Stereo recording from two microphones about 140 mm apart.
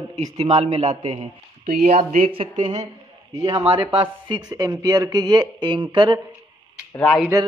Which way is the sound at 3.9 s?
40° right (ahead or behind).